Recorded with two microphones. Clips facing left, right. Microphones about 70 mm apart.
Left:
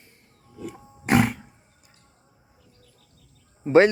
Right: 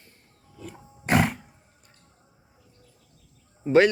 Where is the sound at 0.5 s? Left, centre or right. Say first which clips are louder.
Left 5 dB; centre.